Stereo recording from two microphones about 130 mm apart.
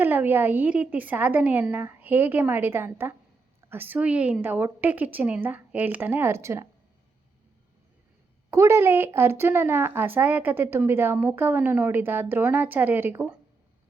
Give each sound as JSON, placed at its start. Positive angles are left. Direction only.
{"t": 0.0, "sound": "a woman's voice", "side_deg": -15}
{"t": 8.4, "sound": "a woman's voice", "side_deg": -20}